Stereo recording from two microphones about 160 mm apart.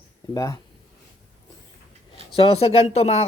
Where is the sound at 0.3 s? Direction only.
20° left (ahead or behind).